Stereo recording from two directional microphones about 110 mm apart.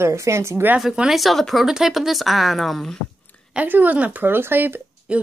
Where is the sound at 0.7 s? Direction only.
5° right (ahead or behind).